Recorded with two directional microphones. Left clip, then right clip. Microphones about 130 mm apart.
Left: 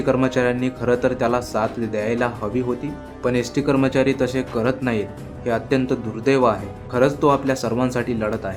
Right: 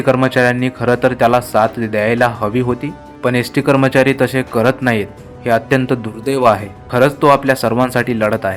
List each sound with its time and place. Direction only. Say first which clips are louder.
0.0 s speech: right 7 dB; 40° right (ahead or behind)